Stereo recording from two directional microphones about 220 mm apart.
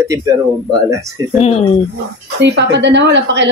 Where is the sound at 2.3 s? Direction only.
50° right (ahead or behind).